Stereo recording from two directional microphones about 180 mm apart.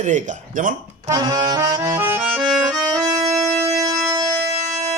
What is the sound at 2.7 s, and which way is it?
Accordion, 20° right (ahead or behind).